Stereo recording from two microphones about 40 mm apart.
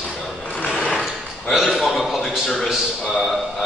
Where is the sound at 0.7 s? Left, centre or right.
Left.